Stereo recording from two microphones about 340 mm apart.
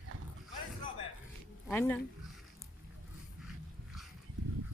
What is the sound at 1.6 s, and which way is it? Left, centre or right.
Speech, centre.